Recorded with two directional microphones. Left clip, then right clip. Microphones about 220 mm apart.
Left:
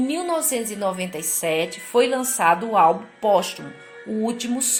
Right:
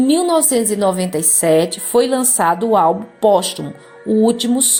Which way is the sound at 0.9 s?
15° right (ahead or behind).